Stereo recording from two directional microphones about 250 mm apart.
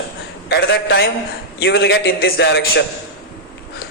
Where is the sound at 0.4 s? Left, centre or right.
Left.